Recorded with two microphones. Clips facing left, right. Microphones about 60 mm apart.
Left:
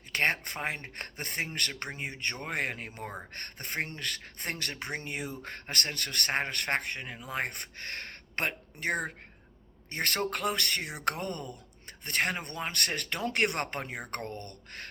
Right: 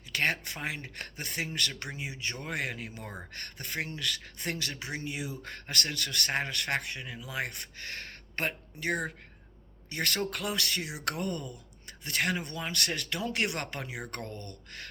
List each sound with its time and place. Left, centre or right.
0.1 s speech: left